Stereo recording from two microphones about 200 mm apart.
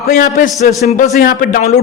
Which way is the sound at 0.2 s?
40° left (ahead or behind).